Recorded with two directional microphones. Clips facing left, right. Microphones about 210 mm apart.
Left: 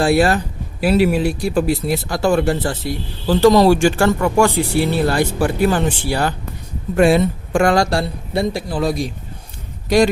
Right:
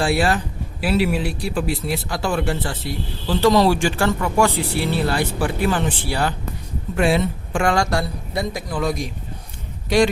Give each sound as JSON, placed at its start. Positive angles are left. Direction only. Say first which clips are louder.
{"t": 0.0, "sound": "speech", "louder": "left 5 dB", "side_deg": 45}